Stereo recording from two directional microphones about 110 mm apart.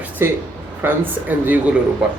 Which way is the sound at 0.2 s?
20° right (ahead or behind).